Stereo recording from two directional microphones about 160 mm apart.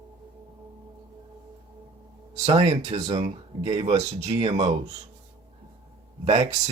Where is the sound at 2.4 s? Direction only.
45° right (ahead or behind).